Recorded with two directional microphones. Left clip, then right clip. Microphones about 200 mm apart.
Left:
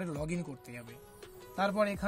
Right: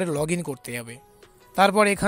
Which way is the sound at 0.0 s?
35° right (ahead or behind).